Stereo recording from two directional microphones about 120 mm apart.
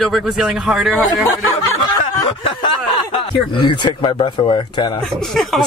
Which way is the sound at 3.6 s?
45° left (ahead or behind).